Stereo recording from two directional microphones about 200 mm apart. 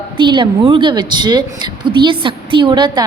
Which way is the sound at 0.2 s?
25° right (ahead or behind).